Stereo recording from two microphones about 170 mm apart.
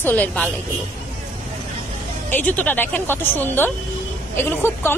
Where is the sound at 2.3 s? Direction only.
10° left (ahead or behind).